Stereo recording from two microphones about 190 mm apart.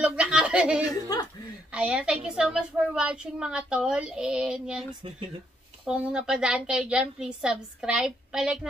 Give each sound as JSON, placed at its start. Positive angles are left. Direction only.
{"t": 0.0, "sound": "a sound", "side_deg": -5}
{"t": 1.1, "sound": "speech", "side_deg": 20}
{"t": 1.7, "sound": "a woman's voice", "side_deg": -5}
{"t": 5.9, "sound": "a woman's voice", "side_deg": -5}